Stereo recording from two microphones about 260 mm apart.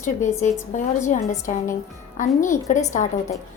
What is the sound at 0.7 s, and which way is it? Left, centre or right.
A woman's voice, left.